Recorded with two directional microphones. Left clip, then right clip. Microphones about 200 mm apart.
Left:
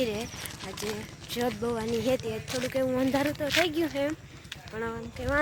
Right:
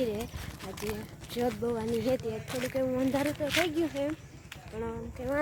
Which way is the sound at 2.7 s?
5° left (ahead or behind).